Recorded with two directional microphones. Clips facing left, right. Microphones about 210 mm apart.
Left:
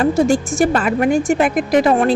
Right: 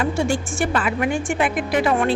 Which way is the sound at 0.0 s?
40° left (ahead or behind).